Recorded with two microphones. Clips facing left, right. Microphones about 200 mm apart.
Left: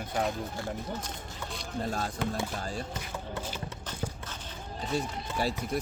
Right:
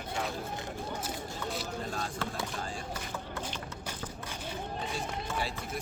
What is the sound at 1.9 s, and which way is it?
Speech, 40° left (ahead or behind).